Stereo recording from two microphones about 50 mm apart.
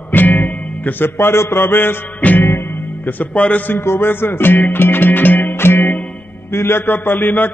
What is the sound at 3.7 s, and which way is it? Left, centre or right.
A man's voice, left.